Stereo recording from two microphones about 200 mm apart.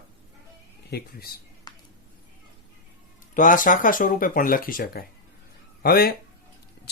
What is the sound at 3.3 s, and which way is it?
Speech, 40° left (ahead or behind).